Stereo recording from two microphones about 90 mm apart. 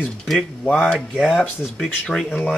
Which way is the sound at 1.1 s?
5° right (ahead or behind).